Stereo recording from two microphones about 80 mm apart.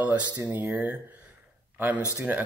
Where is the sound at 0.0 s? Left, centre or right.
Centre.